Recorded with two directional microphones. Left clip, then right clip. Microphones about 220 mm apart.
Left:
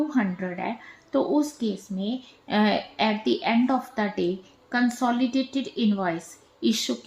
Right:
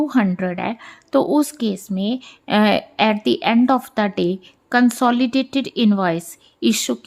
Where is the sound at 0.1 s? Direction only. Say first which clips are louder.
Right 7 dB; 45° right (ahead or behind).